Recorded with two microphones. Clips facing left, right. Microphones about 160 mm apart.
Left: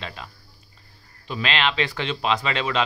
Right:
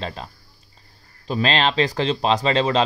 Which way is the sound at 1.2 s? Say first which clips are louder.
Right 4 dB; 35° right (ahead or behind).